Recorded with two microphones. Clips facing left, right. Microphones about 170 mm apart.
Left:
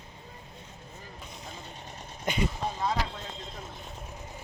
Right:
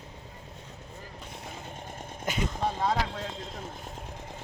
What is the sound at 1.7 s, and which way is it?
Vehicle, 50° right (ahead or behind).